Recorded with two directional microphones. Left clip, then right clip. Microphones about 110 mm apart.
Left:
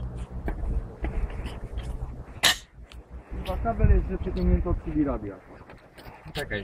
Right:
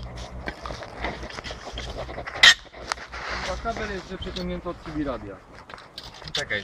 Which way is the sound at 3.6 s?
30° right (ahead or behind).